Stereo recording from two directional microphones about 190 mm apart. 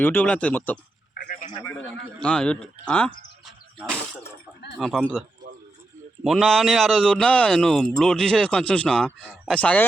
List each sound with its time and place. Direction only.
0.0 s speech: 10° left (ahead or behind)
1.1 s a sound: 50° left (ahead or behind)
2.2 s speech: 5° left (ahead or behind)
4.8 s speech: centre (ahead or behind)
6.2 s speech: centre (ahead or behind)